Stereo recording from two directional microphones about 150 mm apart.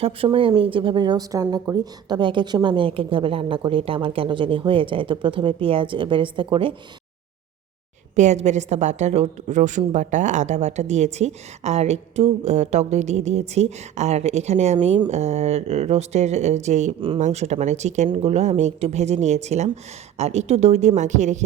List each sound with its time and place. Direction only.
0.0 s a woman's voice: 40° right (ahead or behind)
8.1 s a woman's voice: 50° right (ahead or behind)